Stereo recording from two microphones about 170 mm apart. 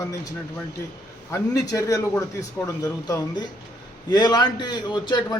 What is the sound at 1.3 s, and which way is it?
A man's voice, 20° left (ahead or behind).